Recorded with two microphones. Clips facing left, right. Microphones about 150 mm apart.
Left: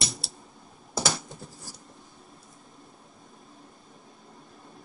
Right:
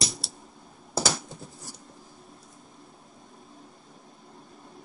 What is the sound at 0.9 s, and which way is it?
Scratch, centre (ahead or behind).